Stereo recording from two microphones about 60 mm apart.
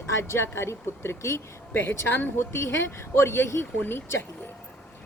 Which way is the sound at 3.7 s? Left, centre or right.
Left.